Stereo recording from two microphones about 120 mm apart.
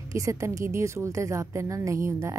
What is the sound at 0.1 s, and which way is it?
A woman's voice, 25° right (ahead or behind).